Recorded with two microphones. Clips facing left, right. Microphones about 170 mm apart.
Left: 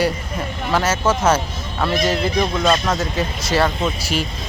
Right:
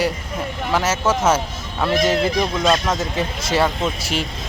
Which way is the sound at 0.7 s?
5° right (ahead or behind).